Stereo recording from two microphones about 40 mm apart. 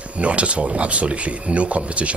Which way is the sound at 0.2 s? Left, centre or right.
Right.